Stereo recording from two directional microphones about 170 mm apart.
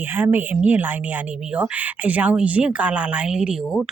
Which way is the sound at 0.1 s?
10° right (ahead or behind).